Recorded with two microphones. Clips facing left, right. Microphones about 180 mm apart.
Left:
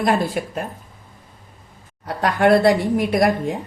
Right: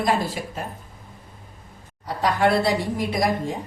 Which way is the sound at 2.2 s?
55° left (ahead or behind).